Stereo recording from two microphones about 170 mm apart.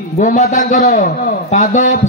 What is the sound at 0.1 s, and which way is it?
A man's voice, 45° left (ahead or behind).